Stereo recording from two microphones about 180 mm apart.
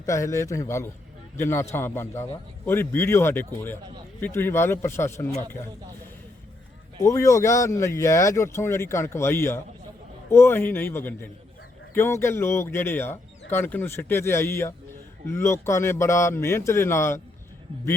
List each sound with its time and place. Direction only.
0.0 s speech: 15° left (ahead or behind)
7.0 s speech: 20° left (ahead or behind)